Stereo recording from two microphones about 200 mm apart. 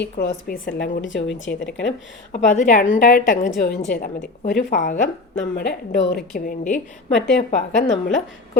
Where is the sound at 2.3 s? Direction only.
35° left (ahead or behind).